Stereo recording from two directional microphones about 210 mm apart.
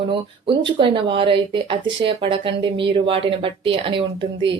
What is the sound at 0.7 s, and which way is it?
Speech, 25° right (ahead or behind).